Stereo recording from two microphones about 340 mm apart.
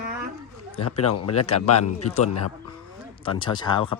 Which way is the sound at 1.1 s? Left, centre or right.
Left.